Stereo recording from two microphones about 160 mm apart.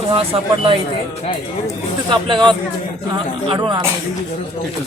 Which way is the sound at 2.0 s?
30° right (ahead or behind).